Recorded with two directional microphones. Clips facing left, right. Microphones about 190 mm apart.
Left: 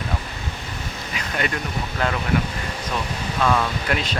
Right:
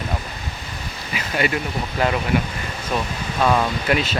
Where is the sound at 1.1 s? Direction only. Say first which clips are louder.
Right 4 dB; 5° right (ahead or behind).